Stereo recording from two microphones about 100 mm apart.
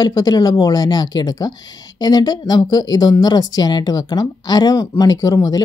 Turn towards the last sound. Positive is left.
turn(degrees=35)  # may be behind; listen again after turning